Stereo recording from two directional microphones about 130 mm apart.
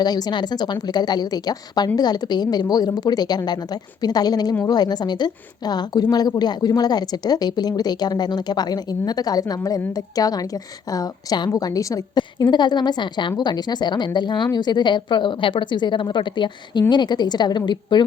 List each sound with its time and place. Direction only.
0.0 s a woman's voice: 30° left (ahead or behind)